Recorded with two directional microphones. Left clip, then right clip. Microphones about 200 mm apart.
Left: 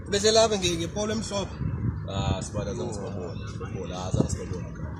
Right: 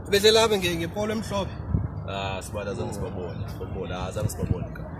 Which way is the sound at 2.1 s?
5° left (ahead or behind).